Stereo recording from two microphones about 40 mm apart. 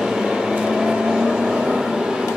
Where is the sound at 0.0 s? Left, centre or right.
Centre.